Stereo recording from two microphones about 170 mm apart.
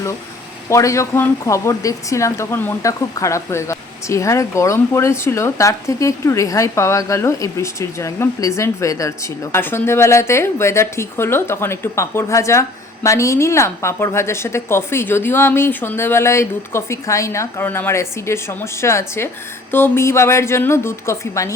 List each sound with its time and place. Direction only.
0.7 s speech: 20° left (ahead or behind)